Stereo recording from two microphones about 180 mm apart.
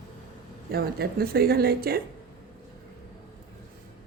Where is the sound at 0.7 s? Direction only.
60° right (ahead or behind).